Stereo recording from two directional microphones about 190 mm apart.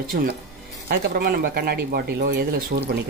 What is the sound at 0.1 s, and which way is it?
Speech, 55° right (ahead or behind).